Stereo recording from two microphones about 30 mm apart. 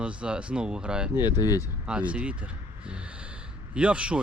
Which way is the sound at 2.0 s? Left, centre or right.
Right.